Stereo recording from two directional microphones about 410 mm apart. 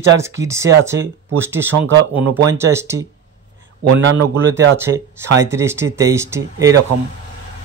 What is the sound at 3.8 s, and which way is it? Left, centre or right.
Speech, right.